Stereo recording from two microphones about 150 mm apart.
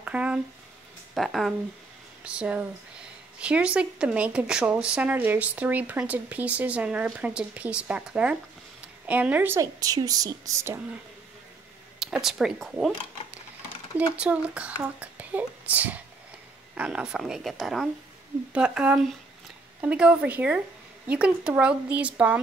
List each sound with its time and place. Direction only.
0.0 s a sound: 10° right (ahead or behind)
1.1 s a woman's voice: centre (ahead or behind); by 10.8 s 20° right (ahead or behind)
12.0 s a woman's voice: centre (ahead or behind)